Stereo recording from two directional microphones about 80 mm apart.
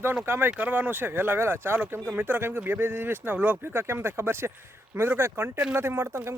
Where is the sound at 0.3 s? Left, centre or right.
Right.